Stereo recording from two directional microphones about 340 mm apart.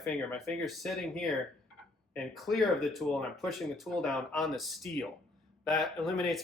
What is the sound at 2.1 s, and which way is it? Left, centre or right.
Speech, centre.